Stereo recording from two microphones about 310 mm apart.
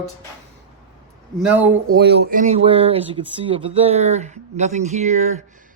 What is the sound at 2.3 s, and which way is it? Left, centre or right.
Speech, right.